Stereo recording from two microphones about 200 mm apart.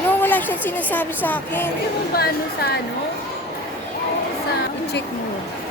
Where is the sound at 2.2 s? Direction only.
50° left (ahead or behind).